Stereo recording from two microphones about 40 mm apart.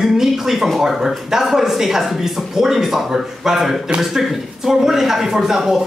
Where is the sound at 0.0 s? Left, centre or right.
Centre.